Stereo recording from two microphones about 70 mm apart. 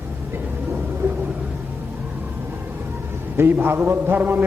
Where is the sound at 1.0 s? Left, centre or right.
Right.